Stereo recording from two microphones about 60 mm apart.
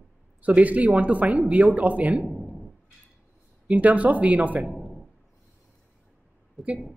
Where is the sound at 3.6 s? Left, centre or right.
Right.